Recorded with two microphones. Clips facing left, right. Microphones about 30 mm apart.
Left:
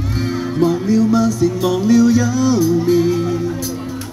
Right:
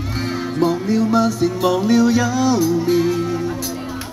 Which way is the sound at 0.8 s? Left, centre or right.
Right.